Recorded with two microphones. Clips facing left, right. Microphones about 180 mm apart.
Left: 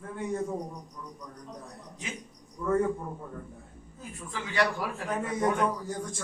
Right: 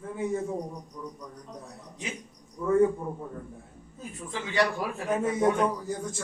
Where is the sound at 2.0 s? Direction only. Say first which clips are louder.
Right 3 dB; 20° right (ahead or behind).